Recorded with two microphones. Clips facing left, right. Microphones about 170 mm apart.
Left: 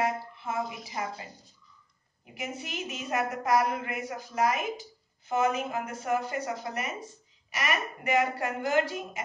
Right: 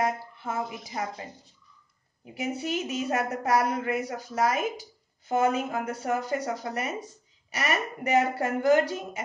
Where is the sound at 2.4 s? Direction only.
35° right (ahead or behind).